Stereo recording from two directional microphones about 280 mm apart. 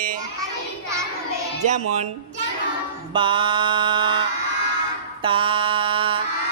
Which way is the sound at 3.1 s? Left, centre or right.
Centre.